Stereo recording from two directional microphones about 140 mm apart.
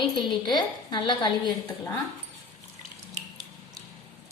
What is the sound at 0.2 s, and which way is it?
A woman's voice, 30° left (ahead or behind).